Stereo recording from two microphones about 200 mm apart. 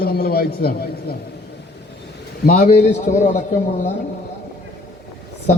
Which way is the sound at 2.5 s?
35° left (ahead or behind).